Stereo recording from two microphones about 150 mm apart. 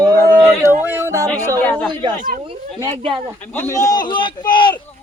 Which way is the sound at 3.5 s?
15° left (ahead or behind).